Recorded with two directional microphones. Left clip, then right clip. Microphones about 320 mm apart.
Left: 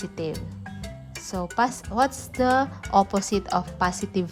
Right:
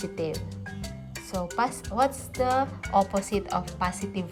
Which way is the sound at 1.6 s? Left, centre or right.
Centre.